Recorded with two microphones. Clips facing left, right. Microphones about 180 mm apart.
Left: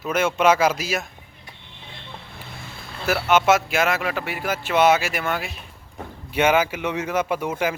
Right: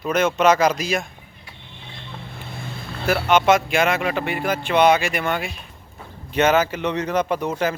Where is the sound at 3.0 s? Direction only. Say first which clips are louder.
Right 1 dB; 5° left (ahead or behind).